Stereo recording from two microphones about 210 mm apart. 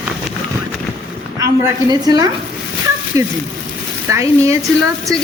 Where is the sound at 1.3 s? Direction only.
15° right (ahead or behind).